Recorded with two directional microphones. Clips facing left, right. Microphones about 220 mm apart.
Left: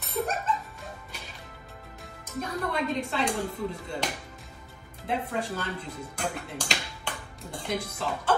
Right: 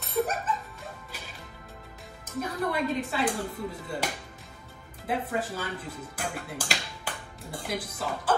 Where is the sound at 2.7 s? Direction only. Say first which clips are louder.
Even; 5° right (ahead or behind).